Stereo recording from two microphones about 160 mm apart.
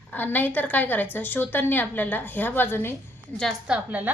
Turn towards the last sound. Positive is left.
turn(degrees=-5)  # may be behind; listen again after turning